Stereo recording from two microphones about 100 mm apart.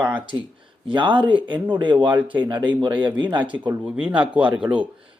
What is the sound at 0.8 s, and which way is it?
Speech, 55° right (ahead or behind).